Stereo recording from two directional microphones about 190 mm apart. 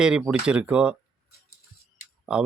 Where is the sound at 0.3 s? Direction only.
5° right (ahead or behind).